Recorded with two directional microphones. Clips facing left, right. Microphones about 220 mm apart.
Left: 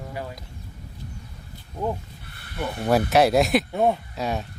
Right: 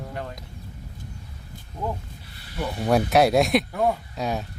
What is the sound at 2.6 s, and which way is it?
Speech, centre (ahead or behind).